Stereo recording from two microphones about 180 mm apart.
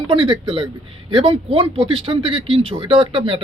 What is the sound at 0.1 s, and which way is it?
Speech, 30° right (ahead or behind).